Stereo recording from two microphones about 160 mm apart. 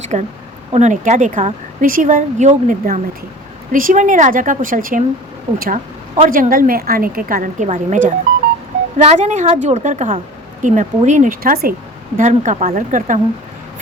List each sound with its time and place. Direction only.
0.0 s a woman's voice: 45° right (ahead or behind); by 11.7 s 65° right (ahead or behind)
12.1 s speech: 50° right (ahead or behind)